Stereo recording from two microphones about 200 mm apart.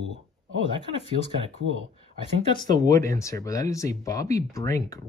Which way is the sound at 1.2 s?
70° right (ahead or behind).